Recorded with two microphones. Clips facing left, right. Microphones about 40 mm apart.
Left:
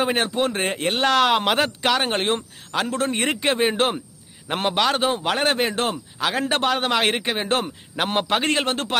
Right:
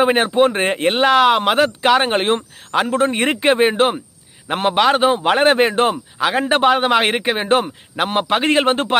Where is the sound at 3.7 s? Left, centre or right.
Centre.